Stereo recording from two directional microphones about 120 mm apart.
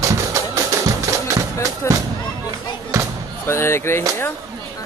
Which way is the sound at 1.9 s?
25° left (ahead or behind).